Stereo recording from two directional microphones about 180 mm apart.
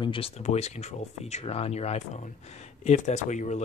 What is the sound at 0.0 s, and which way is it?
Speech, 30° left (ahead or behind).